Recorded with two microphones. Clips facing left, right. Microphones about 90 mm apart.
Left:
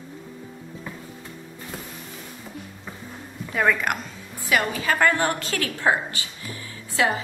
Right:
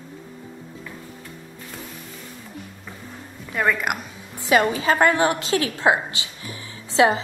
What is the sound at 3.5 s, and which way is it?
Speech, centre (ahead or behind).